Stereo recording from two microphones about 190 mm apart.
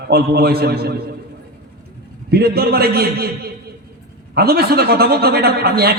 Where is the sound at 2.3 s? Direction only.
55° right (ahead or behind).